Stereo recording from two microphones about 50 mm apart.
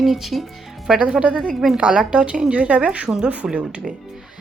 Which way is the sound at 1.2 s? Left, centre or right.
Right.